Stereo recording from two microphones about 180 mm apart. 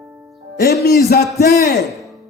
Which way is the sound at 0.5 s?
60° left (ahead or behind).